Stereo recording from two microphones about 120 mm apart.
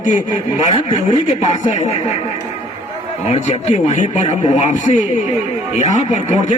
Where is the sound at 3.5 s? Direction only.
80° left.